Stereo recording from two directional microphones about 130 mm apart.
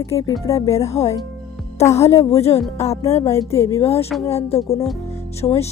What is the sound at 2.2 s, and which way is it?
Music, 25° left (ahead or behind).